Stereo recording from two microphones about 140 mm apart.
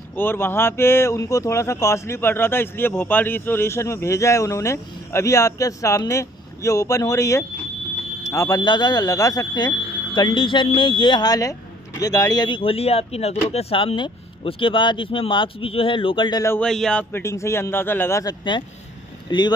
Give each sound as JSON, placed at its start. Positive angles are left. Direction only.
{"t": 0.1, "sound": "speech", "side_deg": 15}
{"t": 16.6, "sound": "a man's voice", "side_deg": 5}
{"t": 17.1, "sound": "a man's voice", "side_deg": 20}
{"t": 19.3, "sound": "speech", "side_deg": 35}